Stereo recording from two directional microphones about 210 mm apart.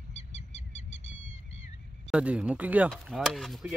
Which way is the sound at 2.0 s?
5° right (ahead or behind).